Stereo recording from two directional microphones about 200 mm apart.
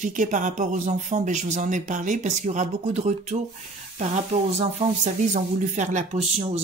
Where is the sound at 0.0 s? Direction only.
40° right (ahead or behind).